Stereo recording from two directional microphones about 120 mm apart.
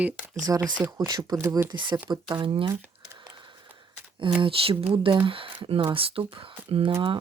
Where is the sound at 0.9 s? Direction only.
35° right (ahead or behind).